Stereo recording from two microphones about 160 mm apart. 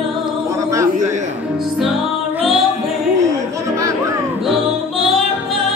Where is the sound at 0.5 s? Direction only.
20° right (ahead or behind).